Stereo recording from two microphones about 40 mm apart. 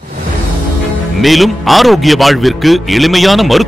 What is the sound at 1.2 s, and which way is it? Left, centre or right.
Speech, centre.